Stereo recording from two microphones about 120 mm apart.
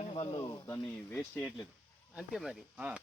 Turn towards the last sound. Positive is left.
turn(degrees=-10)  # may be behind; listen again after turning